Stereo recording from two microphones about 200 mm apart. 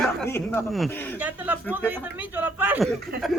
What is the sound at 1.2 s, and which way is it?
Speech, 10° right (ahead or behind).